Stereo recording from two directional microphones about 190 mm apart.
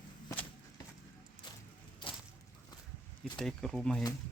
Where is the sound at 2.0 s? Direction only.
25° left (ahead or behind).